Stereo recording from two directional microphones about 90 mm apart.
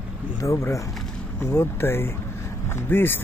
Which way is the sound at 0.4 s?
35° left (ahead or behind).